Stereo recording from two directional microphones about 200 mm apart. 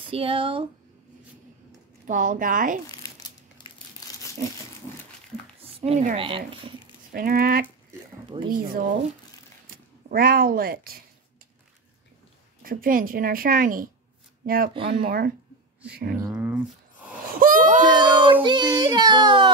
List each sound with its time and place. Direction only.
0.0 s speech: 25° right (ahead or behind)
2.0 s a woman's voice: 40° right (ahead or behind)
2.9 s crumpling: 20° left (ahead or behind)
5.6 s speech: 30° right (ahead or behind)
7.2 s speech: 45° right (ahead or behind)
10.0 s speech: 45° right (ahead or behind)
12.6 s speech: 45° right (ahead or behind)
16.2 s a sound: 10° right (ahead or behind)
17.4 s a sound: 45° right (ahead or behind)
17.8 s a sound: 20° right (ahead or behind)